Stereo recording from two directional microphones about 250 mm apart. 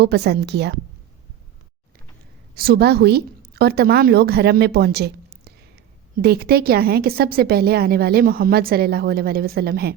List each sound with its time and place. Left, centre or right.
0.0 s a woman's voice: right
2.6 s a woman's voice: right